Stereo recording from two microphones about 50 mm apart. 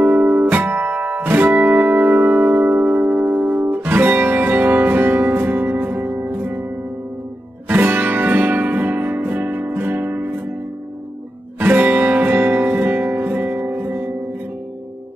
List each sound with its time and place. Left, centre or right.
0.0 s music: right
7.6 s music: right
11.6 s music: right